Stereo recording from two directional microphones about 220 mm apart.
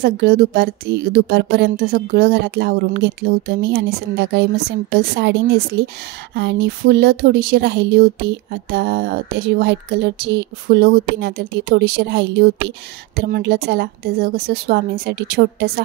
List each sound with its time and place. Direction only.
0.0 s speech: 45° right (ahead or behind)